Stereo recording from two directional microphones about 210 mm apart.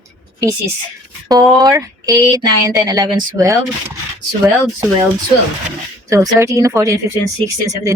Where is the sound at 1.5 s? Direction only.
15° right (ahead or behind).